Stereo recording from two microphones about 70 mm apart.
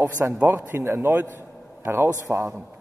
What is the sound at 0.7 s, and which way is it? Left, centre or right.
Speech, right.